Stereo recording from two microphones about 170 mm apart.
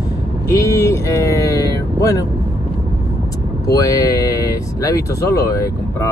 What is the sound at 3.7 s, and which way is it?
Speech, 20° left (ahead or behind).